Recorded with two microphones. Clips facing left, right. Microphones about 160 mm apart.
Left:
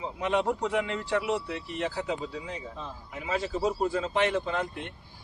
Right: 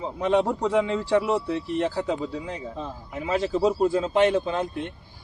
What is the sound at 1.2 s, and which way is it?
Speech, 50° right (ahead or behind).